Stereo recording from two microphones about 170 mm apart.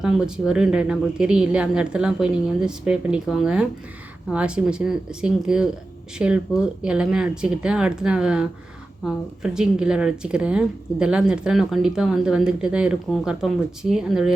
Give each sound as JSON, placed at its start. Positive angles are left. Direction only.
{"t": 0.0, "sound": "speech", "side_deg": -5}